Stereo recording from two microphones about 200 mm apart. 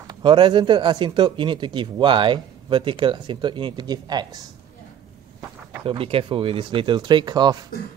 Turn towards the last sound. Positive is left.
turn(degrees=-20)  # may be behind; listen again after turning